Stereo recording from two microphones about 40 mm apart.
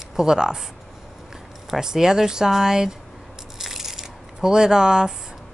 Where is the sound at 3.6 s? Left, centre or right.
Centre.